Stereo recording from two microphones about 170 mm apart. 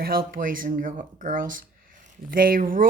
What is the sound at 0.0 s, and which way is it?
Speech, 60° right (ahead or behind).